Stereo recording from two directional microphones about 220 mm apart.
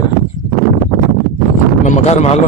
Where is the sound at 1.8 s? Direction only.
30° left (ahead or behind).